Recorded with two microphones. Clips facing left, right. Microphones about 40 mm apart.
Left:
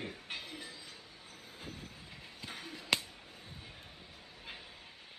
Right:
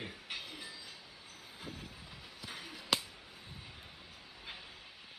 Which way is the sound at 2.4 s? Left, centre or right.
Left.